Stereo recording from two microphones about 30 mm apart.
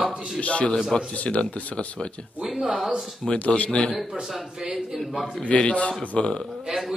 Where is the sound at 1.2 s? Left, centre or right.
Left.